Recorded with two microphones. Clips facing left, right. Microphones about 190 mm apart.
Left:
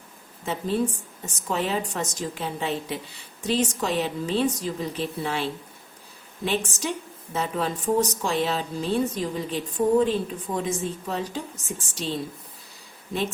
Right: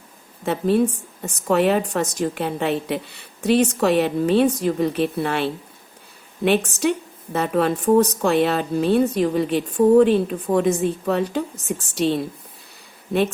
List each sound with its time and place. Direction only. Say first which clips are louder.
0.4 s a woman's voice: right 7 dB; 60° right (ahead or behind)